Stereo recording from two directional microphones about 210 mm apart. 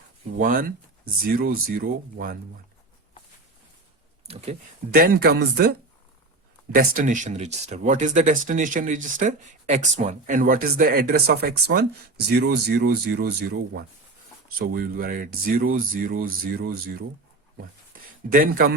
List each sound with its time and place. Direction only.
0.3 s speech: 40° right (ahead or behind)
4.3 s speech: 30° right (ahead or behind)
4.9 s speech: 45° right (ahead or behind)
6.7 s speech: 40° right (ahead or behind)
17.9 s a sound: 40° right (ahead or behind)
18.3 s speech: 40° right (ahead or behind)